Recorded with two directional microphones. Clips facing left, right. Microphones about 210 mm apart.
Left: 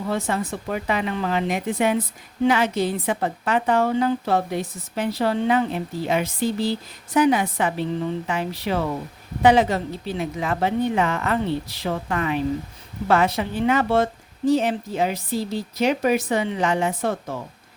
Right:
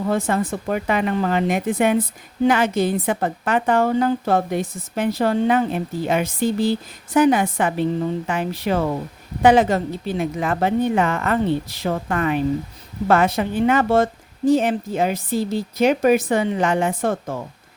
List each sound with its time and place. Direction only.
0.1 s a woman's voice: 50° right (ahead or behind)